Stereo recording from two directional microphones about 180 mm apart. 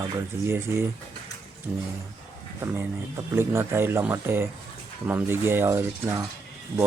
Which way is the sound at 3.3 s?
15° right (ahead or behind).